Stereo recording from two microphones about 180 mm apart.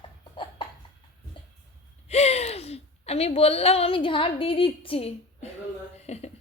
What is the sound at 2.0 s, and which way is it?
A woman's voice, 35° left (ahead or behind).